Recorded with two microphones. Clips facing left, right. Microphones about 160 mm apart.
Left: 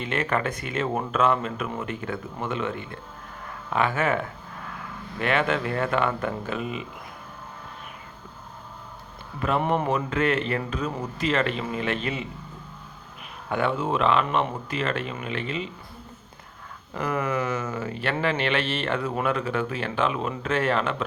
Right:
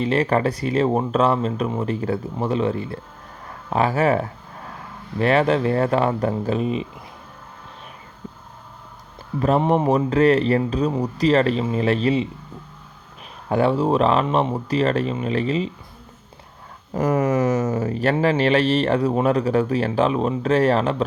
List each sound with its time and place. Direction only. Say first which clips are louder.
0.0 s speech: right 7 dB; 35° right (ahead or behind)
9.9 s speech: right 8 dB; 35° right (ahead or behind)
13.5 s speech: right 7 dB; 35° right (ahead or behind)
16.9 s speech: right 7 dB; 40° right (ahead or behind)